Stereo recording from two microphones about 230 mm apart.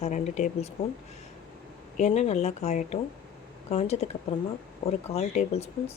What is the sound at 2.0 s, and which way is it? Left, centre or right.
Speech, left.